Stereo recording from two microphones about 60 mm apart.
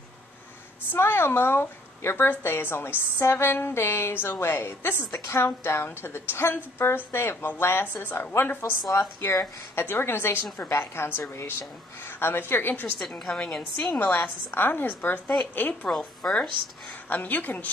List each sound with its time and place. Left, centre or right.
0.9 s a woman's voice: left
9.2 s a woman's voice: left
13.2 s a woman's voice: centre
13.6 s a woman's voice: left
15.9 s a woman's voice: centre
17.1 s a woman's voice: left